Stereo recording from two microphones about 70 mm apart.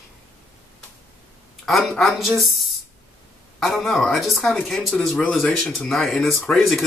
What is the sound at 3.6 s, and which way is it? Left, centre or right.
Speech, centre.